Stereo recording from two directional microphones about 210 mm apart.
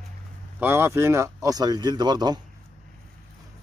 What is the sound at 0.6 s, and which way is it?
Speech, 10° right (ahead or behind).